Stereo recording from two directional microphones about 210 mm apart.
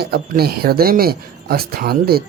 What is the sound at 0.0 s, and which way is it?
Speech, 45° right (ahead or behind).